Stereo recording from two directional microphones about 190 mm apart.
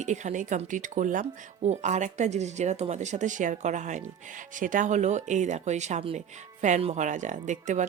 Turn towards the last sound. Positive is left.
turn(degrees=-40)  # may be behind; listen again after turning